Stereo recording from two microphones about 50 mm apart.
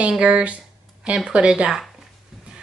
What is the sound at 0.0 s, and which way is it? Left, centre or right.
A woman's voice, right.